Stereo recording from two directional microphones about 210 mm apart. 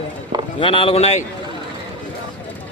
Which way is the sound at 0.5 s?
25° left (ahead or behind).